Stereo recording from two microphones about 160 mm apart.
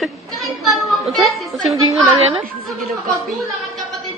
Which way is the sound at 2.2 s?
40° right (ahead or behind).